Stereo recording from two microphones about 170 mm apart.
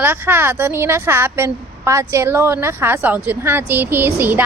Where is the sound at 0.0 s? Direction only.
10° right (ahead or behind).